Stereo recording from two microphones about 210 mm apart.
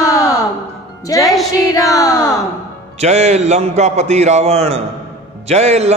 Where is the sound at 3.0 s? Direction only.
30° right (ahead or behind).